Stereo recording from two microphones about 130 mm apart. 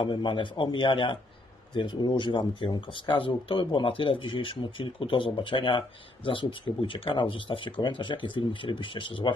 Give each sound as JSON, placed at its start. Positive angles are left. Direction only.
{"t": 0.0, "sound": "speech", "side_deg": 35}